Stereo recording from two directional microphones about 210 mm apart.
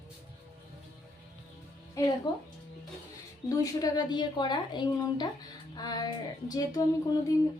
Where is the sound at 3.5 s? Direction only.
20° left (ahead or behind).